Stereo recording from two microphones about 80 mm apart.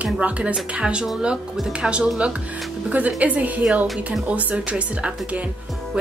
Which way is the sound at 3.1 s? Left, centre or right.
Centre.